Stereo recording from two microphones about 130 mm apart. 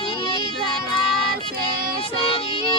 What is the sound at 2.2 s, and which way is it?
Music, 45° left (ahead or behind).